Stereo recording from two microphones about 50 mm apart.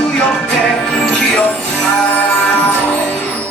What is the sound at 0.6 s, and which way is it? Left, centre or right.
Music, centre.